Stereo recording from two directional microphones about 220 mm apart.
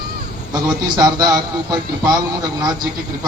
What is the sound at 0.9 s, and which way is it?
Speech, 20° right (ahead or behind).